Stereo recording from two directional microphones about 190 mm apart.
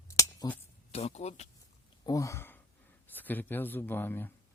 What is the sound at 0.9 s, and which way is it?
Speech, 35° left (ahead or behind).